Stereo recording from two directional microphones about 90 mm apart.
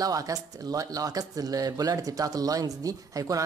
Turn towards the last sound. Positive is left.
turn(degrees=-40)  # may be behind; listen again after turning